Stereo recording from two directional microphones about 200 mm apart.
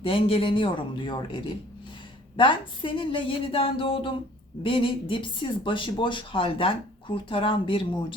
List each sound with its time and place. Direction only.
0.0 s speech: 25° left (ahead or behind)